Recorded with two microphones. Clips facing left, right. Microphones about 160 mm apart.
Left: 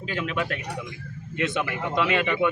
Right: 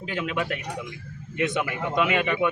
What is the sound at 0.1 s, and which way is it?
A man's voice, 15° right (ahead or behind).